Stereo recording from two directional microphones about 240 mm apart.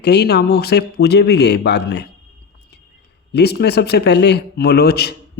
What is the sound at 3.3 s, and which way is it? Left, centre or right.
A man's voice, left.